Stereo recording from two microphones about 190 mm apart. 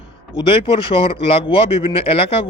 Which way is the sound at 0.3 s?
25° left (ahead or behind).